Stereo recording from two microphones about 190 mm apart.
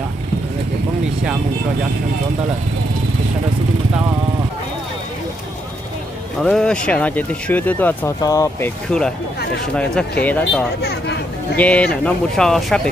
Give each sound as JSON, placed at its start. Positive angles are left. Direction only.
{"t": 6.4, "sound": "speech", "side_deg": 5}
{"t": 10.2, "sound": "speech", "side_deg": 10}
{"t": 10.8, "sound": "a sound", "side_deg": 60}
{"t": 11.5, "sound": "speech", "side_deg": 5}